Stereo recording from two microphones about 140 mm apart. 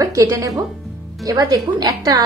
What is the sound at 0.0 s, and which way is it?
A woman's voice, 25° right (ahead or behind).